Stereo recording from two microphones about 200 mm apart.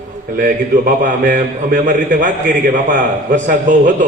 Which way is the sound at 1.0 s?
40° right (ahead or behind).